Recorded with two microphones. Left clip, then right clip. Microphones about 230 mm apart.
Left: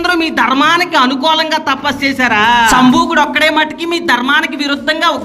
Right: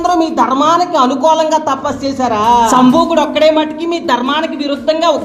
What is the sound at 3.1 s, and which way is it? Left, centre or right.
Speech, left.